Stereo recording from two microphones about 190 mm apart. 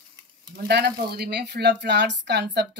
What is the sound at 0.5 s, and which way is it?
Speech, 55° right (ahead or behind).